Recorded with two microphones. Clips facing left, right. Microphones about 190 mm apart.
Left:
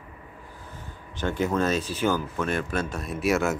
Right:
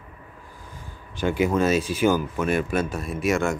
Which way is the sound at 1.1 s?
10° right (ahead or behind).